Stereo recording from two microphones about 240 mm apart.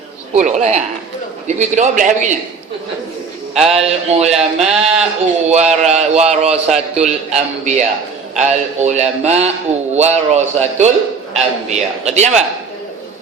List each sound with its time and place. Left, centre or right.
0.3 s a man's voice: right
3.7 s a man's voice: right